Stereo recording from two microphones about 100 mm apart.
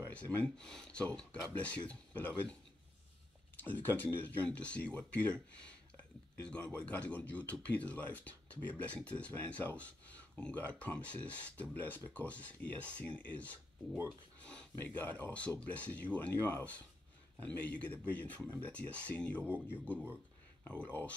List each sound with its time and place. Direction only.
0.1 s speech: 15° left (ahead or behind)
3.6 s speech: 20° left (ahead or behind)
19.4 s a man's voice: 20° right (ahead or behind)
20.8 s speech: 15° left (ahead or behind)